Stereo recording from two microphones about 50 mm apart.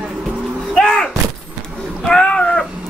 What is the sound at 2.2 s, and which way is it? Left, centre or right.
Cat, left.